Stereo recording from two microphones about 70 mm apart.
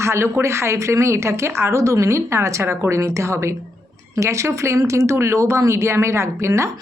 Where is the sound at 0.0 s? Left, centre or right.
Right.